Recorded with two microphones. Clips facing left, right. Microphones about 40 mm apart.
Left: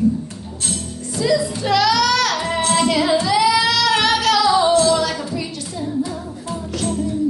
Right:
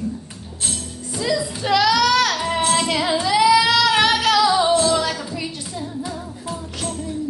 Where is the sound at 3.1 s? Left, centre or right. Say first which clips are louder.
Right 4 dB; centre.